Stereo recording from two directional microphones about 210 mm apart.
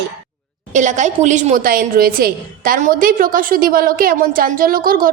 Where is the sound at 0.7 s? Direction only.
35° right (ahead or behind).